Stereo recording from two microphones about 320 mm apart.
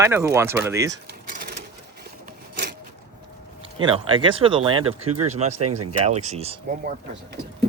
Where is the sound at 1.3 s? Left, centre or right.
Right.